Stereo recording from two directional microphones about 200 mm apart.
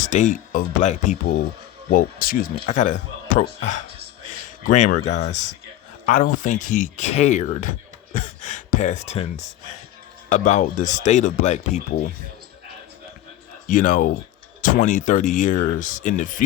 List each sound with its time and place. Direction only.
0.0 s speech: 40° left (ahead or behind)
4.4 s a sound: 35° left (ahead or behind)
4.9 s speech: 35° left (ahead or behind)
13.7 s speech: 40° left (ahead or behind)